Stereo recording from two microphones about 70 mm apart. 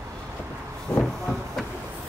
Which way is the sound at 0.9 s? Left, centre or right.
Left.